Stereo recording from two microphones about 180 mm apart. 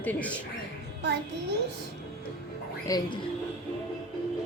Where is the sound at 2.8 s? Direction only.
20° left (ahead or behind).